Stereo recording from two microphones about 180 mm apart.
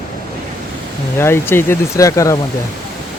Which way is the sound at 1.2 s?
15° left (ahead or behind).